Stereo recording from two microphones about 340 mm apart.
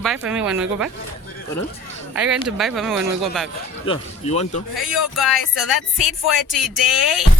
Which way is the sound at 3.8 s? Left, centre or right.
Centre.